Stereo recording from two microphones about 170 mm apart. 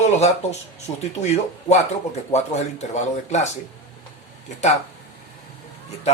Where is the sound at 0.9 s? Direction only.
35° left (ahead or behind).